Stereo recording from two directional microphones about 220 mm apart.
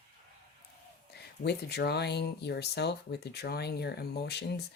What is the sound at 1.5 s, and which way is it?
Speech, 50° left (ahead or behind).